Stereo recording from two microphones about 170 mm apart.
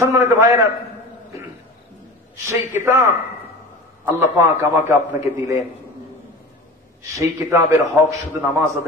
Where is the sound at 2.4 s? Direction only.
15° right (ahead or behind).